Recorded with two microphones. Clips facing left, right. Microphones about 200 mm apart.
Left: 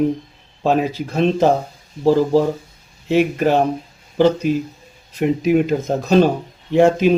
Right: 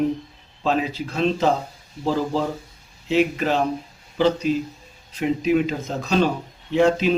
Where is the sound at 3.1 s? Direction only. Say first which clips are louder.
Left 4 dB; 55° left (ahead or behind).